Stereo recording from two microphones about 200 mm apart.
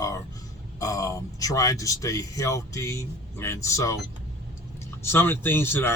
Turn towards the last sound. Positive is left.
turn(degrees=10)  # may be behind; listen again after turning